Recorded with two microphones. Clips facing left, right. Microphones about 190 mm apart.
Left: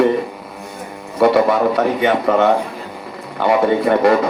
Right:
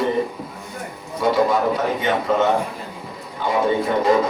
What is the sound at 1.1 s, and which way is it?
A man's voice, 65° left (ahead or behind).